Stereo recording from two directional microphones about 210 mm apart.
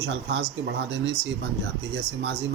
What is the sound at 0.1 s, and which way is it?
Speech, 60° right (ahead or behind).